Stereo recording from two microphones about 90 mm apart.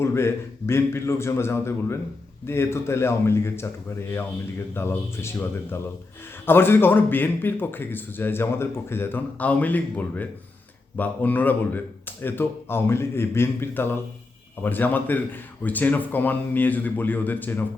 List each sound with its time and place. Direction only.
0.0 s a man's voice: 30° left (ahead or behind)
4.7 s a man's voice: 25° left (ahead or behind)